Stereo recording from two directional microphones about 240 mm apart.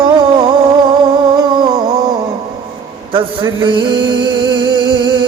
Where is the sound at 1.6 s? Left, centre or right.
Centre.